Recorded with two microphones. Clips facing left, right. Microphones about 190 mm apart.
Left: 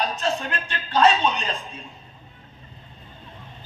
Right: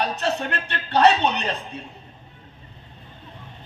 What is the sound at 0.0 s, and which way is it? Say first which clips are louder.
A man's voice: right 1 dB; 65° right (ahead or behind).